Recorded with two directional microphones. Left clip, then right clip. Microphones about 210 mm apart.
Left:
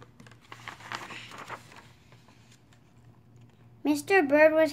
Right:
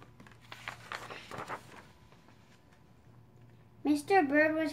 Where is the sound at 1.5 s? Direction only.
20° left (ahead or behind).